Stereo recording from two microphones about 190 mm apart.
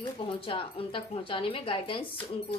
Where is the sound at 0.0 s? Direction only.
30° left (ahead or behind).